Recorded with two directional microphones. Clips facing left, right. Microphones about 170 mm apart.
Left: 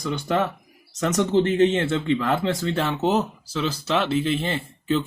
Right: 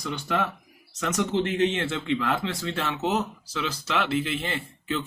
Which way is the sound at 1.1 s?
35° left (ahead or behind).